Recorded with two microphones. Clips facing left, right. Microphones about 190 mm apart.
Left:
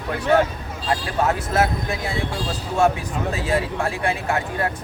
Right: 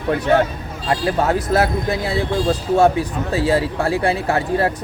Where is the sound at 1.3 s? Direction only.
35° right (ahead or behind).